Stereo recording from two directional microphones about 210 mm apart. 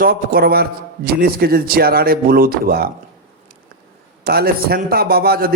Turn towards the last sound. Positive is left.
turn(degrees=-45)  # may be behind; listen again after turning